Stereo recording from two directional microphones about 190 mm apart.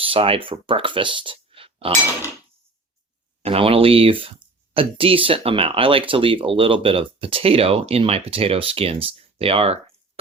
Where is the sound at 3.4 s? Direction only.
30° right (ahead or behind).